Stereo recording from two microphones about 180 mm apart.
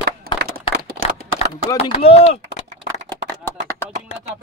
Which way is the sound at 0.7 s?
60° right (ahead or behind).